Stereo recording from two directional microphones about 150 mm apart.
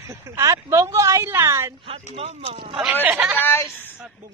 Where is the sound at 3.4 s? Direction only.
15° left (ahead or behind).